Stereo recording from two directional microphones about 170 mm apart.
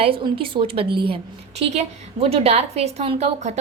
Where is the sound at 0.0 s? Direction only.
30° right (ahead or behind).